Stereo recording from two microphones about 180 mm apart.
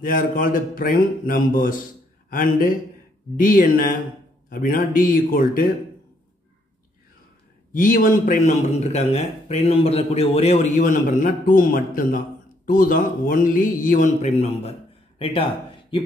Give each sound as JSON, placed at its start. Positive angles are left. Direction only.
{"t": 0.0, "sound": "speech", "side_deg": 50}
{"t": 7.7, "sound": "a man's voice", "side_deg": 50}